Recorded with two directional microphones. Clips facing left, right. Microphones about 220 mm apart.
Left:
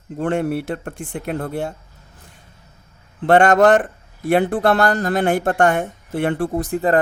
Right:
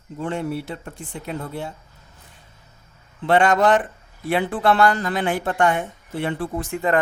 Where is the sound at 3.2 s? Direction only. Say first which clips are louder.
Left 5 dB; 50° left (ahead or behind).